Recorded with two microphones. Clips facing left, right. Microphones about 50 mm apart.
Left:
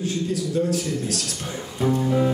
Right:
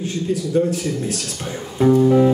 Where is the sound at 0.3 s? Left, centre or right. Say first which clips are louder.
Right 6 dB; right.